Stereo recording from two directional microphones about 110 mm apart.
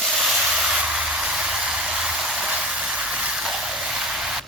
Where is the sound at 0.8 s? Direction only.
5° right (ahead or behind).